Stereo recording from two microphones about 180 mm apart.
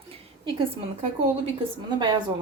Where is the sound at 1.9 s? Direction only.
25° right (ahead or behind).